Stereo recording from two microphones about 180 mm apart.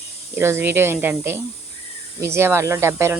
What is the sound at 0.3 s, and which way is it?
Speech, 15° right (ahead or behind).